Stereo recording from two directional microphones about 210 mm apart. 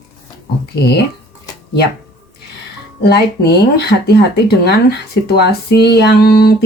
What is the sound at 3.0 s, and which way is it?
Speech, 50° left (ahead or behind).